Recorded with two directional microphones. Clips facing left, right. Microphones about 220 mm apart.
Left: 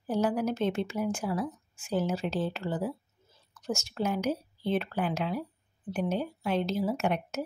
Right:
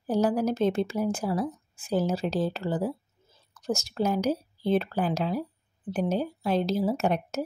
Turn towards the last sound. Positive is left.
turn(degrees=-35)  # may be behind; listen again after turning